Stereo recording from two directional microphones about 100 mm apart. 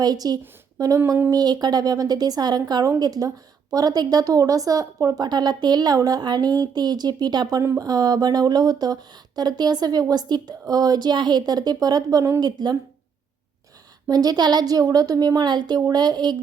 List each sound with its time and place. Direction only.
0.0 s speech: 40° right (ahead or behind)
12.4 s speech: 45° right (ahead or behind)
14.1 s speech: 40° right (ahead or behind)